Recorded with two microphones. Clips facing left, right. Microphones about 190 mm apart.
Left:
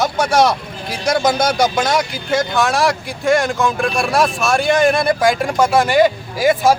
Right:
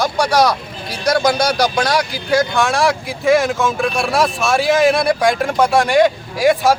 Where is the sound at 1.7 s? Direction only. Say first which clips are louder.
Even; centre (ahead or behind).